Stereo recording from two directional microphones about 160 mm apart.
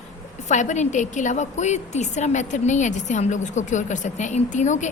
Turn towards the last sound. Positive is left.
turn(degrees=50)  # may be behind; listen again after turning